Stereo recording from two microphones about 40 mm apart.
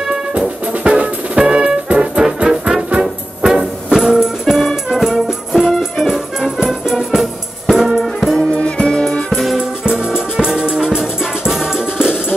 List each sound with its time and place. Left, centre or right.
0.3 s music: right; by 8.1 s centre
8.4 s music: left
9.6 s music: centre